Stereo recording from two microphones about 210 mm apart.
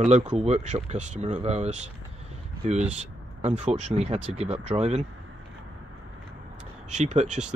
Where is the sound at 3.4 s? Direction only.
30° right (ahead or behind).